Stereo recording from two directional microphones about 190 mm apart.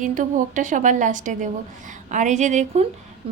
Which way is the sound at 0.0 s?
45° right (ahead or behind).